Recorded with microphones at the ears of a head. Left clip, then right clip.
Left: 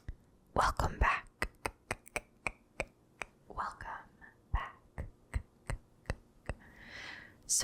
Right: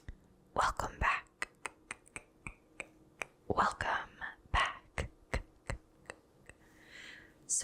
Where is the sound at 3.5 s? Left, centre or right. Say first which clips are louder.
Right 10 dB; right.